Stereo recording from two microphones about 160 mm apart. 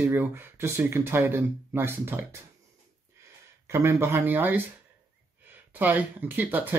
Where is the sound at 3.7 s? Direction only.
15° right (ahead or behind).